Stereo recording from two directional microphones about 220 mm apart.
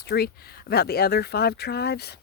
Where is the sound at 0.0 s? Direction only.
45° left (ahead or behind).